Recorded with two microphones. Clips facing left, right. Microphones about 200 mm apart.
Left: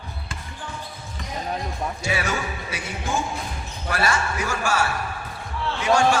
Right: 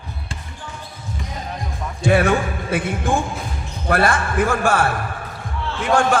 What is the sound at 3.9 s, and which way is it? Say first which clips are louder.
A man's voice: right 6 dB; 55° right (ahead or behind).